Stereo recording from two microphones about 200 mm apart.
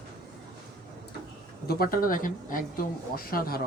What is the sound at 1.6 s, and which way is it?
Speech, 50° left (ahead or behind).